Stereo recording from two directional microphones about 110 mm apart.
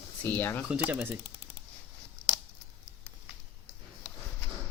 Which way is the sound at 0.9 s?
15° right (ahead or behind).